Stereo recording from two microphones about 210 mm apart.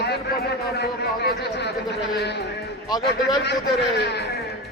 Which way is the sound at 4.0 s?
50° left (ahead or behind).